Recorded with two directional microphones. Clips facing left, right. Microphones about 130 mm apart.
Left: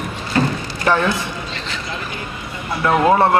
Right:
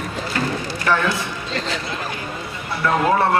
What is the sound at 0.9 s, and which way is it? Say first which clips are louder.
Speech: left 3 dB; 20° left (ahead or behind).